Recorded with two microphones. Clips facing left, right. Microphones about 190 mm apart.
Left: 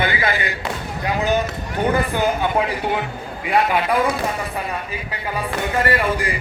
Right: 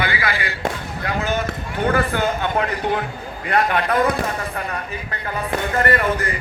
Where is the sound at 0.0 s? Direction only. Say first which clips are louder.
Left 2 dB; 25° left (ahead or behind).